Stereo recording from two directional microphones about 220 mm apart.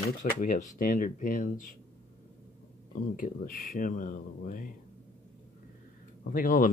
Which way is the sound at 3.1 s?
40° left (ahead or behind).